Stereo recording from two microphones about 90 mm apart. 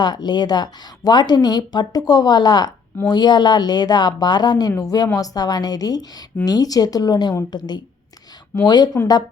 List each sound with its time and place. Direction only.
0.0 s speech: 50° left (ahead or behind)
8.6 s speech: 50° left (ahead or behind)